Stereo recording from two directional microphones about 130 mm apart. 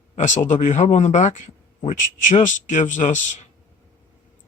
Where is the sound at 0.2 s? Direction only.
70° left (ahead or behind).